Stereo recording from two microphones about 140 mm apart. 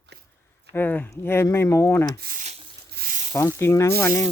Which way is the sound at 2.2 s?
80° right.